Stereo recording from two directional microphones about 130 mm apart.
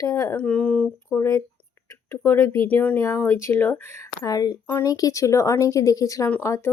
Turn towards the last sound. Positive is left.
turn(degrees=20)  # may be behind; listen again after turning